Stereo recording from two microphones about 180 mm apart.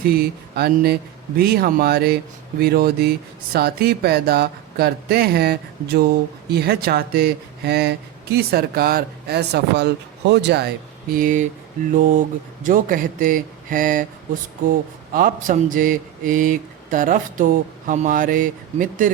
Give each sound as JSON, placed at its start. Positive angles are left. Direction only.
{"t": 0.0, "sound": "speech", "side_deg": -60}
{"t": 11.1, "sound": "speech", "side_deg": -45}
{"t": 12.6, "sound": "speech", "side_deg": -50}